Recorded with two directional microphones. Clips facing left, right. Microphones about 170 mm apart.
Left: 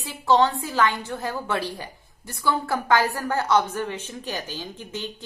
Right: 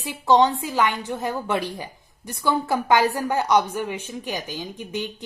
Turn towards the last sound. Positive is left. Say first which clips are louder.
# right 4 dB
turn(degrees=-15)  # may be behind; listen again after turning